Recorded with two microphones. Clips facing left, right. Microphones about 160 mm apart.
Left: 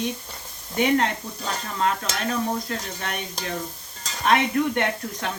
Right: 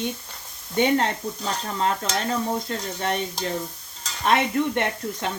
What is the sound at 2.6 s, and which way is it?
Speech, 30° right (ahead or behind).